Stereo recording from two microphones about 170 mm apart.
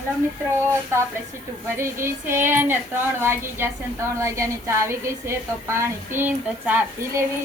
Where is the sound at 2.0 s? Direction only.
15° right (ahead or behind).